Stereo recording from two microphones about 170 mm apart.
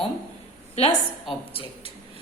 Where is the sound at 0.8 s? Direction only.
40° left (ahead or behind).